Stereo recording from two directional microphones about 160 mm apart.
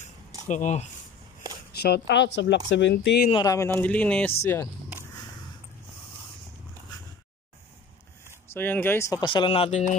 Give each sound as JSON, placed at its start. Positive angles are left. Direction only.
{"t": 0.5, "sound": "speech", "side_deg": 50}
{"t": 1.7, "sound": "speech", "side_deg": 85}
{"t": 3.4, "sound": "speech", "side_deg": 15}
{"t": 8.5, "sound": "speech", "side_deg": 10}
{"t": 9.2, "sound": "speech", "side_deg": 30}